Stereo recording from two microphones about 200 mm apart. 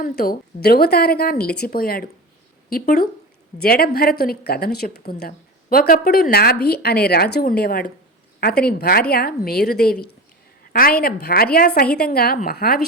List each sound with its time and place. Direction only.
0.0 s a woman's voice: 50° left (ahead or behind)